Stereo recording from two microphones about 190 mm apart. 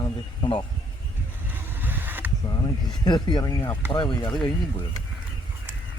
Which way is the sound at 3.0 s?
20° left (ahead or behind).